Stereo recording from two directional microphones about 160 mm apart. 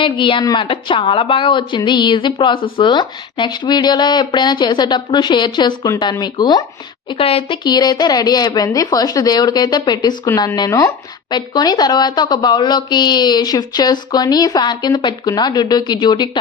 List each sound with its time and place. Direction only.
0.0 s a woman's voice: 30° left (ahead or behind)